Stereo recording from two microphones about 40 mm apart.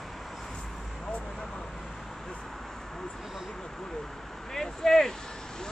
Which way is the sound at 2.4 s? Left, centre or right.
Centre.